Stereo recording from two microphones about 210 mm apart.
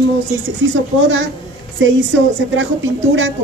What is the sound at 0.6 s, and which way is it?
Speech, 65° right (ahead or behind).